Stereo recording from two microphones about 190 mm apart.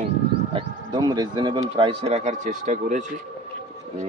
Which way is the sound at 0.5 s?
20° right (ahead or behind).